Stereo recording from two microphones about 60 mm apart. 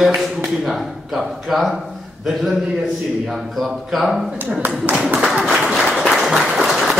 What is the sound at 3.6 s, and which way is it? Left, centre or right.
A man's voice, centre.